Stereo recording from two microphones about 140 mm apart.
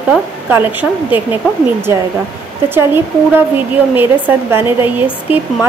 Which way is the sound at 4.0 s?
15° right (ahead or behind).